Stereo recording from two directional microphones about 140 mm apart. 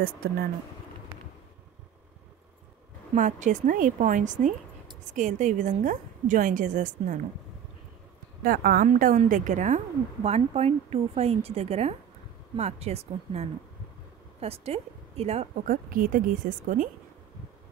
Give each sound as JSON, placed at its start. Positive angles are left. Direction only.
{"t": 3.2, "sound": "a woman's voice", "side_deg": -60}
{"t": 8.5, "sound": "a woman's voice", "side_deg": -85}
{"t": 10.2, "sound": "a woman's voice", "side_deg": -50}
{"t": 15.6, "sound": "a woman's voice", "side_deg": -80}